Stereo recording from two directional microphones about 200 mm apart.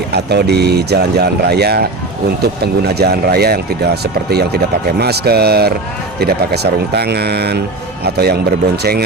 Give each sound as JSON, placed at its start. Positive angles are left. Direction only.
{"t": 0.1, "sound": "speech", "side_deg": -55}
{"t": 4.9, "sound": "speech", "side_deg": -55}